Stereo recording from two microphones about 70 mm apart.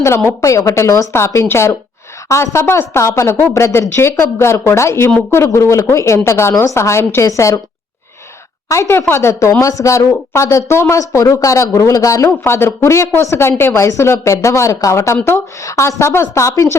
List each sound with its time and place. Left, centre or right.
0.3 s speech: left
8.7 s speech: left
12.4 s speech: left